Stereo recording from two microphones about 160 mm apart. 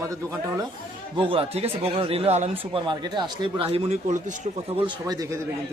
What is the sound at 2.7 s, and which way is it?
Speech, 30° right (ahead or behind).